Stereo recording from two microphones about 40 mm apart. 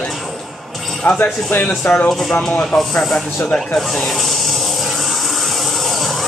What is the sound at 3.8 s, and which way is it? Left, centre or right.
Snake, centre.